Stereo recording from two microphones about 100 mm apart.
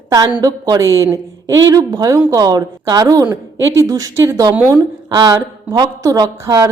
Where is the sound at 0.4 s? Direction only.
40° right (ahead or behind).